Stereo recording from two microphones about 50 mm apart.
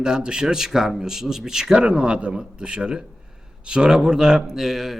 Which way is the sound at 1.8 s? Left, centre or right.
Right.